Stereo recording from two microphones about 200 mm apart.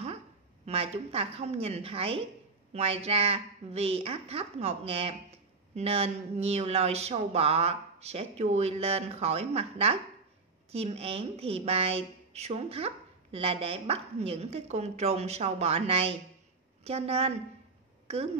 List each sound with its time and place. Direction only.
0.7 s a woman's voice: 30° right (ahead or behind)